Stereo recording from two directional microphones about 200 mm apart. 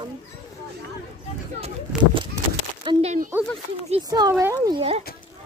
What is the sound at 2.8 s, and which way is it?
Speech, 35° right (ahead or behind).